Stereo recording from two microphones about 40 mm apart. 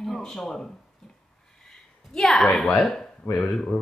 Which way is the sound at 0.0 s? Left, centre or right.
Centre.